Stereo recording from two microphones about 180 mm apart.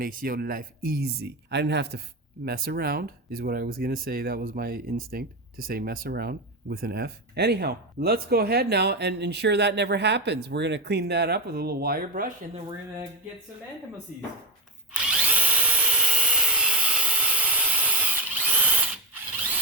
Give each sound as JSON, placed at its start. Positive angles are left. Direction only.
{"t": 0.0, "sound": "speech", "side_deg": -50}
{"t": 14.9, "sound": "drill", "side_deg": -5}
{"t": 16.1, "sound": "rub", "side_deg": -5}